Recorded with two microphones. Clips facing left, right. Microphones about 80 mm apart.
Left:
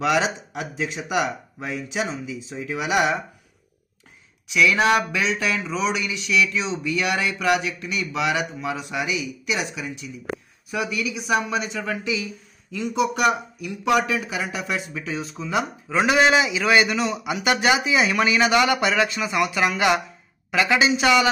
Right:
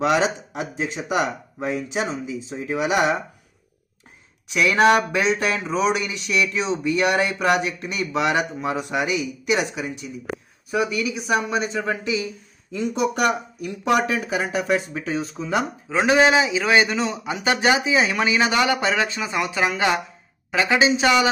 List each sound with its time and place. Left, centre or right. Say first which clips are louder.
0.0 s speech: right 2 dB; right
4.5 s speech: right 2 dB; right
15.4 s speech: left 1 dB; right